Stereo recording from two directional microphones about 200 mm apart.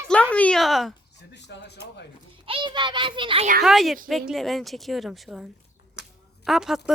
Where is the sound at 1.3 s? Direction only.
60° left (ahead or behind).